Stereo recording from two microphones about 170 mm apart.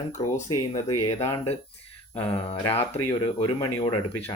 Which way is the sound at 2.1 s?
10° left (ahead or behind).